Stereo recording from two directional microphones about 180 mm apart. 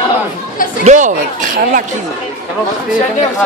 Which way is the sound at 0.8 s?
45° right (ahead or behind).